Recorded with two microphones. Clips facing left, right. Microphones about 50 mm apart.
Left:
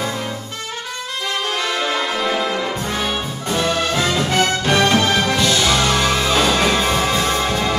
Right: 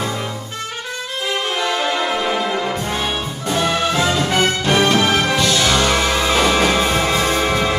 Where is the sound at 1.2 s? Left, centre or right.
Centre.